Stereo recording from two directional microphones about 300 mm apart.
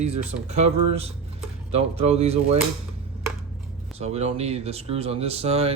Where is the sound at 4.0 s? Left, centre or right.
Right.